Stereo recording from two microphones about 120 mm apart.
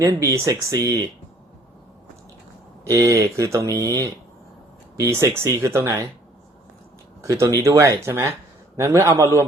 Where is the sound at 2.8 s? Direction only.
25° right (ahead or behind).